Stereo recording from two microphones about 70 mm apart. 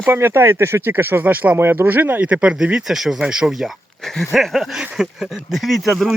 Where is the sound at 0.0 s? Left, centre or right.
Right.